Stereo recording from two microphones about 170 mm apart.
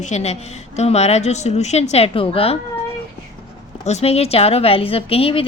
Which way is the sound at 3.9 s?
40° left (ahead or behind).